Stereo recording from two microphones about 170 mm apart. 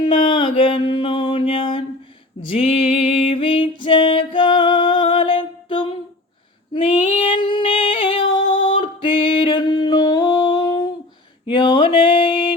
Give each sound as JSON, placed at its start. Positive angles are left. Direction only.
{"t": 0.0, "sound": "mantra", "side_deg": 30}
{"t": 2.5, "sound": "music", "side_deg": 35}
{"t": 7.3, "sound": "female singing", "side_deg": 30}
{"t": 11.4, "sound": "mantra", "side_deg": 30}